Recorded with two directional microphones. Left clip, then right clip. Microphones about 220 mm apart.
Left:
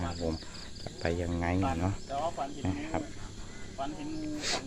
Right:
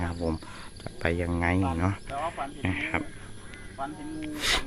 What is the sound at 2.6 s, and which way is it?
Speech, 25° right (ahead or behind).